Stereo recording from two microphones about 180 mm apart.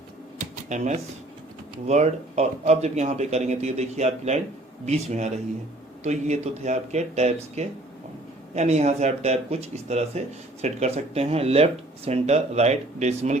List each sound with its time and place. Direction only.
0.7 s speech: 45° right (ahead or behind)